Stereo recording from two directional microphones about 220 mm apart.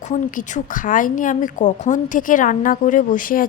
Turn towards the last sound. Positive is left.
turn(degrees=40)  # may be behind; listen again after turning